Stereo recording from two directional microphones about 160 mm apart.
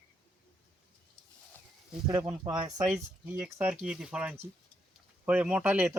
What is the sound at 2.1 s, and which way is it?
Speech, 20° right (ahead or behind).